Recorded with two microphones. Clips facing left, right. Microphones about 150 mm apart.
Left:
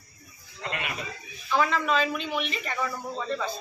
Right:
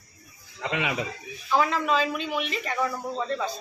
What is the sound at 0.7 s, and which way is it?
Speech, 90° right.